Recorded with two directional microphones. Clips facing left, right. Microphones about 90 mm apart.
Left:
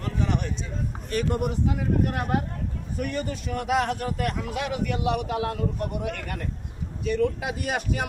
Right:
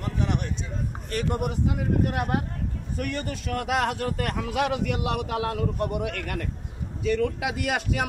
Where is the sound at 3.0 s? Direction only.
65° right (ahead or behind).